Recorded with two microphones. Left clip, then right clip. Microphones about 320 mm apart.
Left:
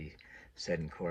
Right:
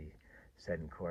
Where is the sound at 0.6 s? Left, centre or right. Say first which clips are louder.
Left 4 dB; right.